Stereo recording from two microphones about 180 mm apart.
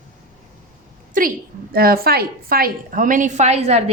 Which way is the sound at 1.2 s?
50° right (ahead or behind).